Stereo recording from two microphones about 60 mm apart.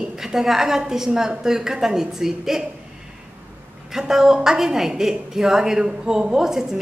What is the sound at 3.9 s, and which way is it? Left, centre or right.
A woman's voice, centre.